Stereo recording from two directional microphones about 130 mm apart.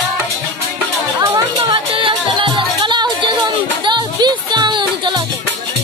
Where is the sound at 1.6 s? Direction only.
40° right (ahead or behind).